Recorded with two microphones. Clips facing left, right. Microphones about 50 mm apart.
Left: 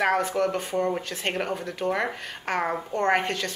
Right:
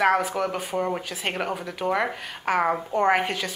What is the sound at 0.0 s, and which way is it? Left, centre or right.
Speech, centre.